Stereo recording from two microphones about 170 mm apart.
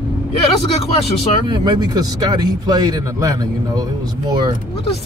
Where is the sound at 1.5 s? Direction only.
25° right (ahead or behind).